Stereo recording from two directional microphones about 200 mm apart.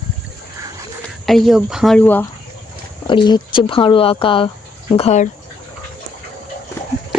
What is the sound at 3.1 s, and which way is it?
Speech, 25° left (ahead or behind).